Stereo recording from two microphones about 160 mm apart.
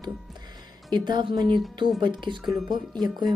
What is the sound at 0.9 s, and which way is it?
Speech, 25° right (ahead or behind).